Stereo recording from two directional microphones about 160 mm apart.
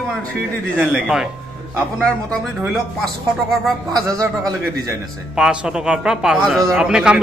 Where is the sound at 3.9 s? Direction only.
25° right (ahead or behind).